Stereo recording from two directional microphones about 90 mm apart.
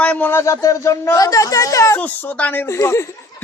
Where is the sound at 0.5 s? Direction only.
40° left (ahead or behind).